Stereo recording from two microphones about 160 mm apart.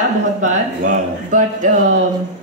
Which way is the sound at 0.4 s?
50° right (ahead or behind).